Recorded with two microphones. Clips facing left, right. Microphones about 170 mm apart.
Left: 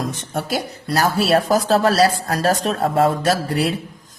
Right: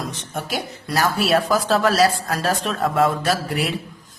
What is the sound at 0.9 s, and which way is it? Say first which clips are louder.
A woman's voice: left 2 dB; 35° left (ahead or behind).